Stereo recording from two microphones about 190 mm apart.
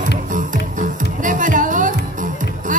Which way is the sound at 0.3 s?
45° right (ahead or behind).